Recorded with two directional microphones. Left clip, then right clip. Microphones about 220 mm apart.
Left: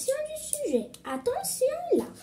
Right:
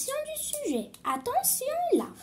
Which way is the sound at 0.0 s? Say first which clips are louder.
Left 3 dB; 35° right (ahead or behind).